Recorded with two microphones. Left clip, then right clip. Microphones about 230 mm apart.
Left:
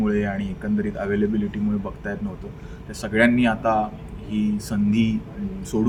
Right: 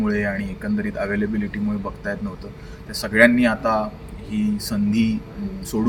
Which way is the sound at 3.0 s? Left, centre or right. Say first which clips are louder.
Right 4 dB; centre.